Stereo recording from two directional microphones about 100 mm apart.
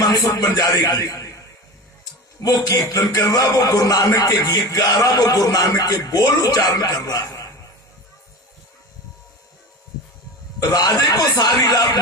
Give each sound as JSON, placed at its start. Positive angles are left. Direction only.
{"t": 0.0, "sound": "a man's voice", "side_deg": 40}
{"t": 2.4, "sound": "a man's voice", "side_deg": 35}
{"t": 10.6, "sound": "a man's voice", "side_deg": 40}